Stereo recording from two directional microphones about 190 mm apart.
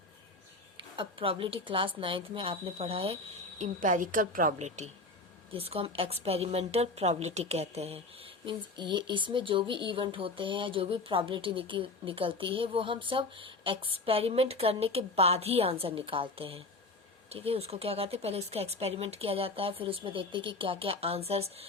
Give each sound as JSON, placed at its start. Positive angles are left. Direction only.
{"t": 0.9, "sound": "speech", "side_deg": -30}
{"t": 3.6, "sound": "a woman's voice", "side_deg": -45}